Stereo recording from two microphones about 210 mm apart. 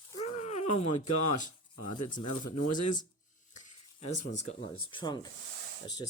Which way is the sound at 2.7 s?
35° left (ahead or behind).